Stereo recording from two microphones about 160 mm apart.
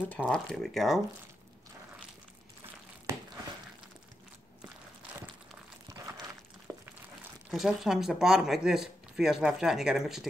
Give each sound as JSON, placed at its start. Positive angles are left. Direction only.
{"t": 0.1, "sound": "speech", "side_deg": 10}
{"t": 6.7, "sound": "a sound", "side_deg": -20}
{"t": 7.5, "sound": "speech", "side_deg": 0}